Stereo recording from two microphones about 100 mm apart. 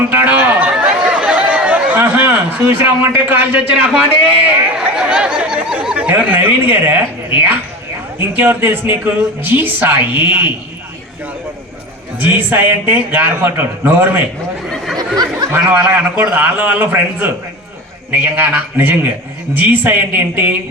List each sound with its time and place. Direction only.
0.1 s chatter: 20° right (ahead or behind)
1.5 s a sound: 15° right (ahead or behind)
4.4 s speech: 10° right (ahead or behind)
12.2 s speech: 20° right (ahead or behind)
14.9 s a sound: 40° right (ahead or behind)
15.5 s speech: 20° right (ahead or behind)